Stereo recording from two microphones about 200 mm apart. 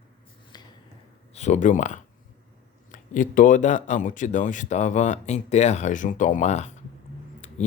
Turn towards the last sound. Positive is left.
turn(degrees=35)  # may be behind; listen again after turning